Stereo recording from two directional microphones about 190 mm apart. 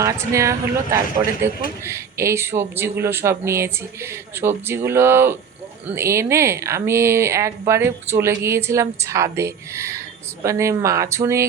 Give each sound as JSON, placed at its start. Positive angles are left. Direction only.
{"t": 0.0, "sound": "speech", "side_deg": -15}